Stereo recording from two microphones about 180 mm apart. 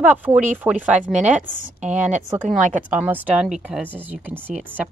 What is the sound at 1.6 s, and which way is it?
A woman's voice, 40° right (ahead or behind).